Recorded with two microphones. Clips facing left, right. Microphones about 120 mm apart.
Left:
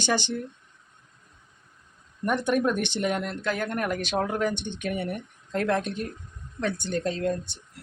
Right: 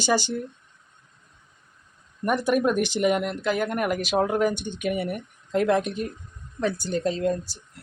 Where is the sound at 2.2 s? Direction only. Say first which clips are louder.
Right 2 dB; 10° right (ahead or behind).